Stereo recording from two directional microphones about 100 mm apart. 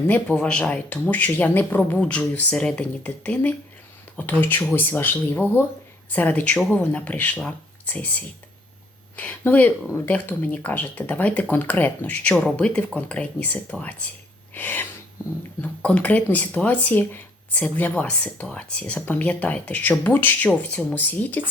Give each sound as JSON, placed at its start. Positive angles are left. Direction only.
{"t": 0.1, "sound": "speech", "side_deg": 10}
{"t": 14.5, "sound": "sneeze", "side_deg": 20}
{"t": 15.6, "sound": "speech", "side_deg": 15}